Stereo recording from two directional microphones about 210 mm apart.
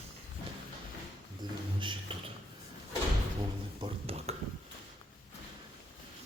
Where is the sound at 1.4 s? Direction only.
20° right (ahead or behind).